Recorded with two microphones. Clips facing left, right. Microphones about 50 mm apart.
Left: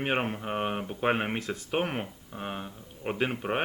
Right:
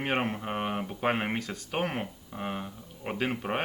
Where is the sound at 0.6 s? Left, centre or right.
Centre.